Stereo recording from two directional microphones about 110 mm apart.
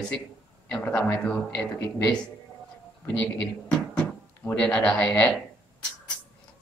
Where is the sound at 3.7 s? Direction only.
10° left (ahead or behind).